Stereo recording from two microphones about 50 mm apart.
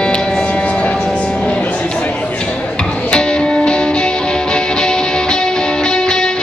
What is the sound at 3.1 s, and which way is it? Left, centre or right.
Music, centre.